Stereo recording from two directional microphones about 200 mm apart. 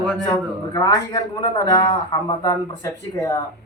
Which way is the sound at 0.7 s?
20° left (ahead or behind).